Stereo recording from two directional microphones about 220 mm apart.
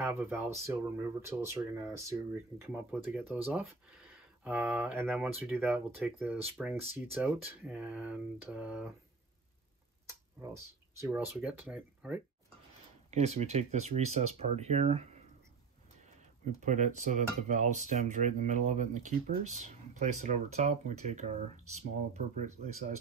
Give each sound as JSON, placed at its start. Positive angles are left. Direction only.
{"t": 0.0, "sound": "speech", "side_deg": -10}
{"t": 10.4, "sound": "speech", "side_deg": -15}
{"t": 13.1, "sound": "speech", "side_deg": -30}
{"t": 16.5, "sound": "speech", "side_deg": -35}